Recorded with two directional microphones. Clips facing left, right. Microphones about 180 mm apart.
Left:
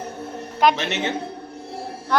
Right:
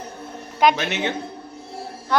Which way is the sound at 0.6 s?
Centre (ahead or behind).